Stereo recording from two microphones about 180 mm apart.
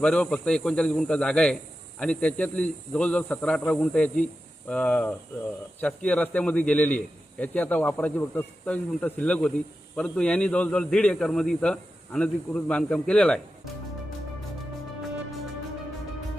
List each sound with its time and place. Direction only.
0.0 s a man's voice: 5° left (ahead or behind)